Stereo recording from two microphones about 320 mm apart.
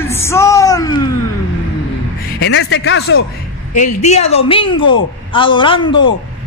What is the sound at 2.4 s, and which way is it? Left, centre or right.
Speech, left.